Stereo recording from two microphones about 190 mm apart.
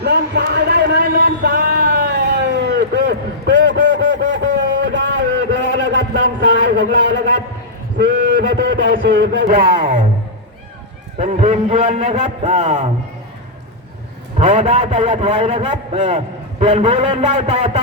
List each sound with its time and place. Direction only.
0.0 s a sound: 60° right (ahead or behind)
9.5 s speech: 45° right (ahead or behind)
11.2 s a man's voice: 35° right (ahead or behind)
14.3 s a man's voice: 35° right (ahead or behind)